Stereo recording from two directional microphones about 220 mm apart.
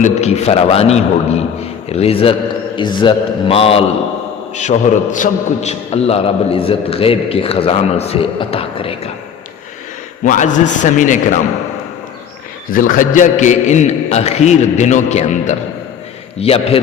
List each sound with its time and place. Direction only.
0.0 s a man's voice: 30° left (ahead or behind)
10.2 s a man's voice: 35° left (ahead or behind)
13.0 s a man's voice: 35° left (ahead or behind)